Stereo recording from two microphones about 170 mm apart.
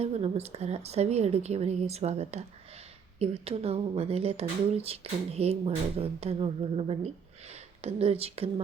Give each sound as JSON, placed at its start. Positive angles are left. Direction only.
{"t": 0.0, "sound": "speech", "side_deg": -40}